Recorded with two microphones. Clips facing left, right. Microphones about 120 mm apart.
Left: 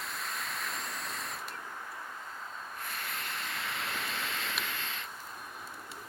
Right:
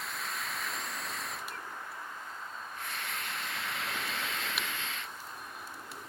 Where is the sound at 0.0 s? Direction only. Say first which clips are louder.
Even; centre (ahead or behind).